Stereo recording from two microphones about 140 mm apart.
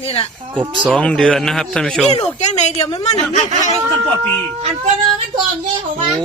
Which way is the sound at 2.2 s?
50° left (ahead or behind).